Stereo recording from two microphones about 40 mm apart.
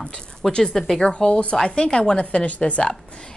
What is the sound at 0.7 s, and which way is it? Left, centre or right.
Speech, centre.